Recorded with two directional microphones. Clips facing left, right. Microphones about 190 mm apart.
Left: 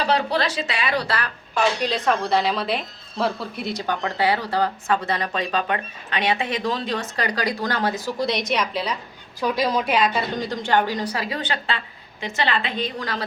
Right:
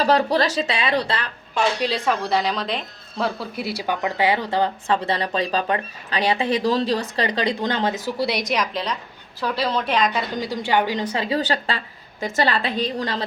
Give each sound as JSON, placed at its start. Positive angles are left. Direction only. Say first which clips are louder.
{"t": 0.0, "sound": "speech", "louder": "right 3 dB", "side_deg": -40}
{"t": 1.8, "sound": "a woman's voice", "louder": "even", "side_deg": -5}
{"t": 4.9, "sound": "speech", "louder": "right 1 dB", "side_deg": -30}
{"t": 8.5, "sound": "a woman's voice", "louder": "even", "side_deg": 5}
{"t": 10.7, "sound": "a woman's voice", "louder": "even", "side_deg": -15}
{"t": 11.3, "sound": "speech", "louder": "right 4 dB", "side_deg": -40}